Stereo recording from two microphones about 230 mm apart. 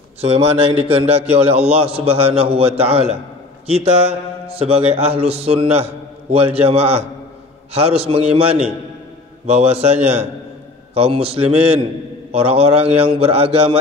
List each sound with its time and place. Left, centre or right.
0.2 s a man's voice: right
11.0 s a man's voice: right